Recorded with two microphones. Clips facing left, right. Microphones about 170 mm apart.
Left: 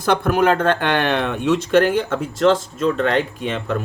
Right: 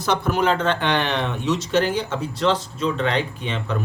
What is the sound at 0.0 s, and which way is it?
Speech, 55° left (ahead or behind).